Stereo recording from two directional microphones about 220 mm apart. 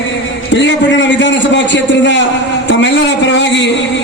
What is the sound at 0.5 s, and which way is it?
A man's voice, 55° left (ahead or behind).